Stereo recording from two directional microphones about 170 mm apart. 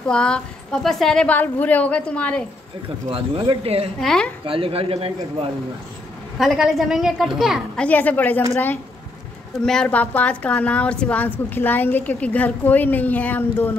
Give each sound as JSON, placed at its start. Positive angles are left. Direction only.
{"t": 0.0, "sound": "a woman's voice", "side_deg": 5}
{"t": 3.1, "sound": "speech", "side_deg": -35}
{"t": 4.0, "sound": "a woman's voice", "side_deg": 5}
{"t": 4.5, "sound": "speech", "side_deg": -30}
{"t": 6.3, "sound": "a woman's voice", "side_deg": 0}
{"t": 9.7, "sound": "a woman's voice", "side_deg": 5}